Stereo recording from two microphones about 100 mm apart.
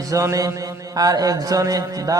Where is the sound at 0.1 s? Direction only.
30° right (ahead or behind).